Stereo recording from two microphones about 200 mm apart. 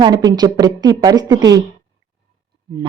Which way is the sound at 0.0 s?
20° right (ahead or behind).